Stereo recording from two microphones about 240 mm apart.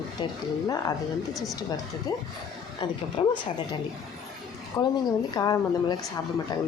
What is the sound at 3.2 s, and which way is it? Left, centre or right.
Speech, left.